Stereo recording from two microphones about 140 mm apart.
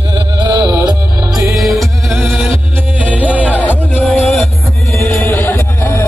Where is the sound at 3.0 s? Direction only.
10° right (ahead or behind).